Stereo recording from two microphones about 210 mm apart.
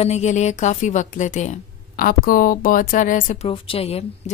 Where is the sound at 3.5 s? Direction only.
25° left (ahead or behind).